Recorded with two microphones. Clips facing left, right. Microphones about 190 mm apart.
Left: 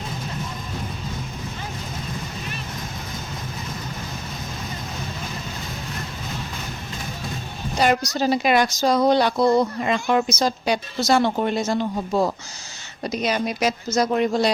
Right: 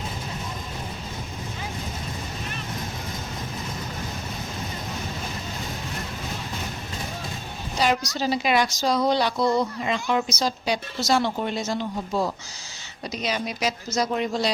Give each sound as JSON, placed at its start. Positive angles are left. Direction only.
{"t": 7.8, "sound": "a woman's voice", "side_deg": 50}